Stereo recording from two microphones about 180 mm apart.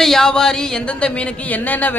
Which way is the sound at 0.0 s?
Centre (ahead or behind).